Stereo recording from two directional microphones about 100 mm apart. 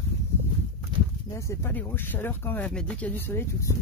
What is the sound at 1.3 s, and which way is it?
Speech, 30° left (ahead or behind).